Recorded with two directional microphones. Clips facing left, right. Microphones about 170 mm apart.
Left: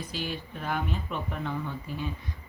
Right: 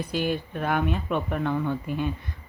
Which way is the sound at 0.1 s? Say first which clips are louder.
Right 8 dB; 55° right (ahead or behind).